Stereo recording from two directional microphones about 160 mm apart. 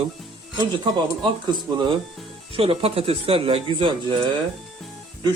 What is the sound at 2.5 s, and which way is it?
A man's voice, 35° right (ahead or behind).